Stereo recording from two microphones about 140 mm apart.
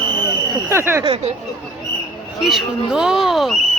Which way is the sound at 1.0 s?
50° right (ahead or behind).